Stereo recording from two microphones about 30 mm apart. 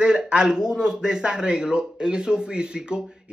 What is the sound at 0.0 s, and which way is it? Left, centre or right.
A man's voice, right.